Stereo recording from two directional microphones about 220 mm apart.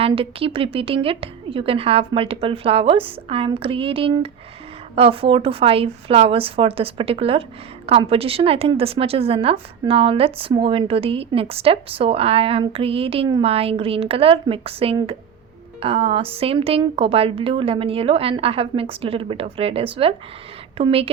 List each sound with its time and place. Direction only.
0.0 s a woman's voice: 25° right (ahead or behind)